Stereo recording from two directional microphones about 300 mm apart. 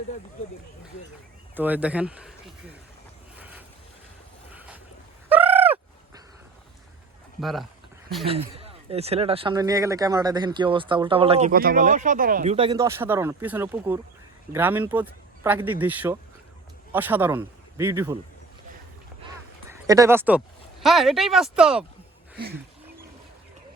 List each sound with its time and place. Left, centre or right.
1.5 s speech: centre
3.3 s boat: centre
5.3 s fowl: centre
8.3 s a man's voice: centre
19.7 s speech: centre